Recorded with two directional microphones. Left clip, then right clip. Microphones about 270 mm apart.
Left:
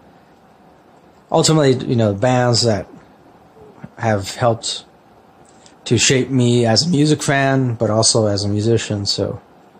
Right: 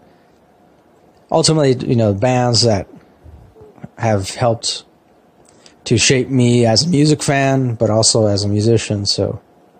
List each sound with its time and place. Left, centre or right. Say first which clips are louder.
1.3 s speech: even; centre
3.9 s speech: right 1 dB; centre
5.9 s speech: right 1 dB; centre